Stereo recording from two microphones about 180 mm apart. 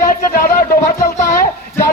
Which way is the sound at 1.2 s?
15° left (ahead or behind).